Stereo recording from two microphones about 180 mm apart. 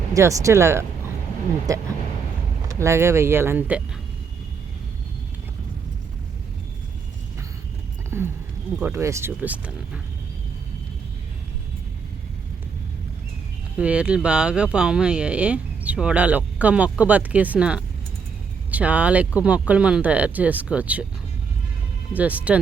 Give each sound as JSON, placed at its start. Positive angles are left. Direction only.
{"t": 0.1, "sound": "speech", "side_deg": -15}
{"t": 8.1, "sound": "speech", "side_deg": -10}
{"t": 13.7, "sound": "speech", "side_deg": -5}
{"t": 22.1, "sound": "speech", "side_deg": -10}